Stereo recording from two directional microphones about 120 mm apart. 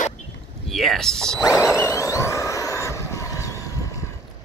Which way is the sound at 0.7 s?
Centre (ahead or behind).